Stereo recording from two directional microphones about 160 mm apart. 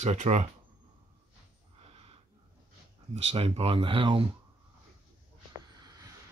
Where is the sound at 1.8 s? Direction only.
40° right (ahead or behind).